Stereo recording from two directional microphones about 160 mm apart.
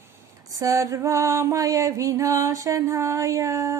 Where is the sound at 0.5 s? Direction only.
20° right (ahead or behind).